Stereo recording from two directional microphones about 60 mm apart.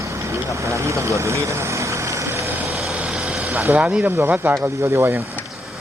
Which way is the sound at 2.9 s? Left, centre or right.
Right.